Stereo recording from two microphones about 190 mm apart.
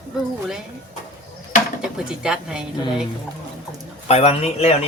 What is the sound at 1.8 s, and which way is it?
Speech, 5° right (ahead or behind).